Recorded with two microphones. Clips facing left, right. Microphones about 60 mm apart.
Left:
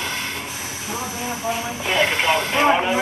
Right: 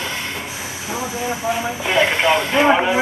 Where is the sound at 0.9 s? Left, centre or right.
Right.